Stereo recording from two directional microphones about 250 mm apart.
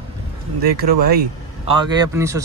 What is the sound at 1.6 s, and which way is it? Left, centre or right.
Speech, centre.